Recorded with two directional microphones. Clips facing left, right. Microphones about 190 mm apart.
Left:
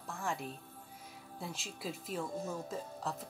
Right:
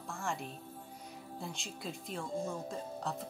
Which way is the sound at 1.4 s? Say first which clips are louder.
Left 1 dB; 5° left (ahead or behind).